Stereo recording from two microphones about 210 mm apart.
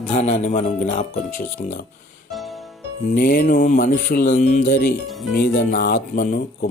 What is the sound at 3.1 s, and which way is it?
Speech, 45° left (ahead or behind).